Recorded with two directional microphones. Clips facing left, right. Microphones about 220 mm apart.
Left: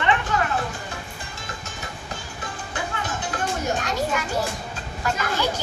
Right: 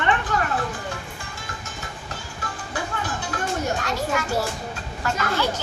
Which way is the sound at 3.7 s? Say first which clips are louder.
Even; 20° left (ahead or behind).